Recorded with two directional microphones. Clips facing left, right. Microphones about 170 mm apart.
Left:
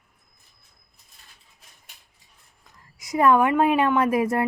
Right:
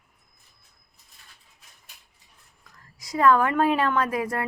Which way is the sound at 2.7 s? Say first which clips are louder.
Left 4 dB; 20° left (ahead or behind).